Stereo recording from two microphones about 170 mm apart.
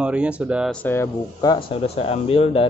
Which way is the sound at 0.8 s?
15° left (ahead or behind).